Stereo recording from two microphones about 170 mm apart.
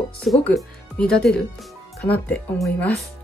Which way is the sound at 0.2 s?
5° left (ahead or behind).